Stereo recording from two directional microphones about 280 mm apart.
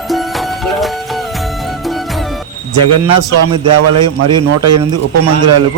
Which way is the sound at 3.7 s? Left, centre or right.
Right.